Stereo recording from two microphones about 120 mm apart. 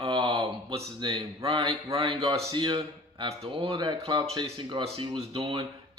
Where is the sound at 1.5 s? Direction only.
50° right (ahead or behind).